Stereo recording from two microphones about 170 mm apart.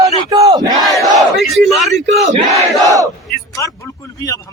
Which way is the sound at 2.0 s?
90° right.